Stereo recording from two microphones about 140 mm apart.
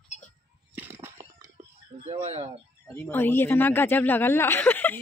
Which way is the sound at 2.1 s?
45° right (ahead or behind).